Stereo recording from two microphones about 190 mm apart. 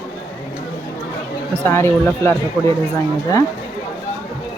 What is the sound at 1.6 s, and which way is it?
Speech, 10° left (ahead or behind).